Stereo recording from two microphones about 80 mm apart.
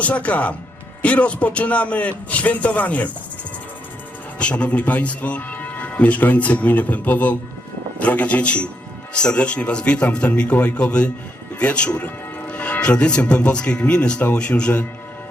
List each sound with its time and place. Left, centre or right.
0.0 s speech: centre
4.4 s speech: centre